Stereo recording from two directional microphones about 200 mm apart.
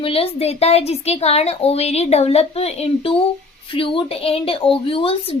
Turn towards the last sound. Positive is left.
turn(degrees=30)  # may be behind; listen again after turning